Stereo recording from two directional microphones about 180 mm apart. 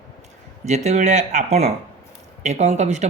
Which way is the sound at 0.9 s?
40° right (ahead or behind).